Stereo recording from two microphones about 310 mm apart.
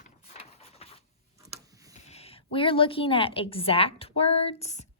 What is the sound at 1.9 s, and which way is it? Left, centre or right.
A woman's voice, left.